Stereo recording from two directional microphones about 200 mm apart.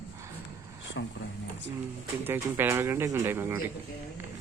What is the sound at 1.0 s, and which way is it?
Speech, 65° left (ahead or behind).